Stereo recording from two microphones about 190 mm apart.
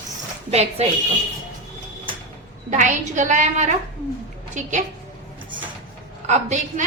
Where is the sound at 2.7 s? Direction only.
40° right (ahead or behind).